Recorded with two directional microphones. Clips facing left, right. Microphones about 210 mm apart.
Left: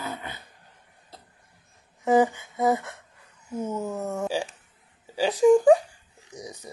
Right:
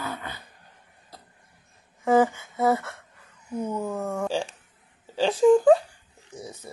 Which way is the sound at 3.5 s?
5° left (ahead or behind).